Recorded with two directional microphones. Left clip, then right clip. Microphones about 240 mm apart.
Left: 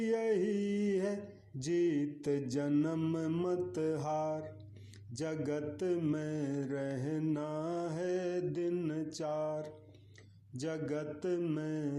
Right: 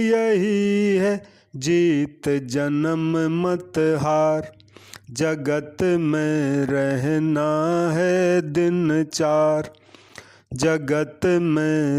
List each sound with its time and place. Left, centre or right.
0.0 s mantra: right